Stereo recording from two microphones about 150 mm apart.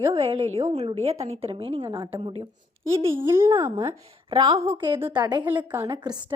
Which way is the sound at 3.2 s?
15° right (ahead or behind).